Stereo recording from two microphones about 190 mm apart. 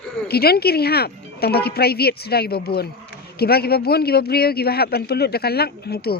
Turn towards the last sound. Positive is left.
turn(degrees=55)  # may be behind; listen again after turning